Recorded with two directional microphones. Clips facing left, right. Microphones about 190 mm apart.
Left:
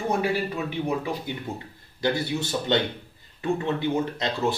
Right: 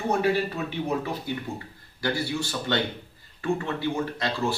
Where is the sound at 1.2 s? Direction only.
20° left (ahead or behind).